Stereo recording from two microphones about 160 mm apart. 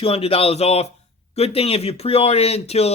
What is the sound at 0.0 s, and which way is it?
Speech, 35° left (ahead or behind).